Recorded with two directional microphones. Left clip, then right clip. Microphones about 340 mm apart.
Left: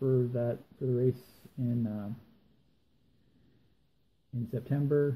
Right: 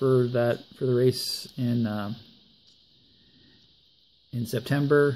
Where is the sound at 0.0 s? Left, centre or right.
Right.